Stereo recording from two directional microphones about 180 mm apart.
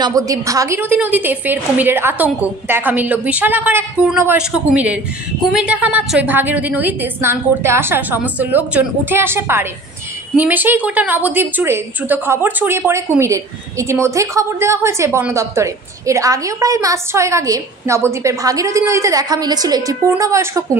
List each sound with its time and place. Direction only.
0.0 s a woman's voice: 20° right (ahead or behind)